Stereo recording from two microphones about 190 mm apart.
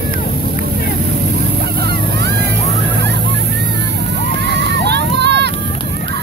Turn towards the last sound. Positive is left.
turn(degrees=-60)  # may be behind; listen again after turning